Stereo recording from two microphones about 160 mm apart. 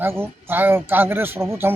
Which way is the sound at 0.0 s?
15° right (ahead or behind).